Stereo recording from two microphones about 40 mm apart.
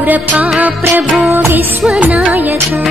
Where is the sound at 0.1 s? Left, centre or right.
Right.